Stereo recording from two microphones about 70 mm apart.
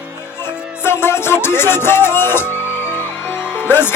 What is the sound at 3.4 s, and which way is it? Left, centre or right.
Music, centre.